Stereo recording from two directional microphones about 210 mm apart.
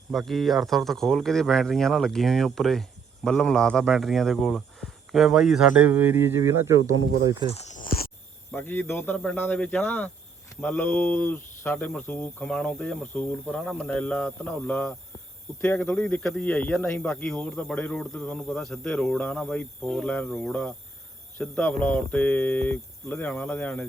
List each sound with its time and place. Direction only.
0.1 s a man's voice: centre (ahead or behind)
7.5 s a sound: 35° left (ahead or behind)
8.5 s a man's voice: 10° left (ahead or behind)